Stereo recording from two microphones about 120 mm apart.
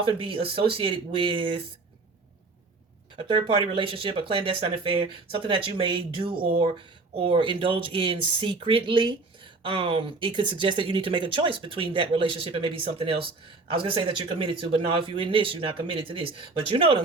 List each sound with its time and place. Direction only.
0.0 s speech: 45° right (ahead or behind)
3.2 s speech: 40° right (ahead or behind)